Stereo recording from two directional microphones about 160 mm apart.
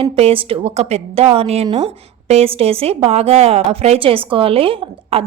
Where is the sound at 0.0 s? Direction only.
35° right (ahead or behind).